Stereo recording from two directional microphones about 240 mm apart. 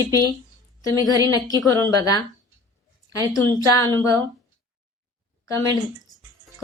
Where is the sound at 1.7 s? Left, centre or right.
Centre.